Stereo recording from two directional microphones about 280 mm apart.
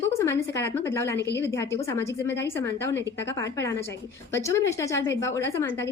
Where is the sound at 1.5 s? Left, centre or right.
Centre.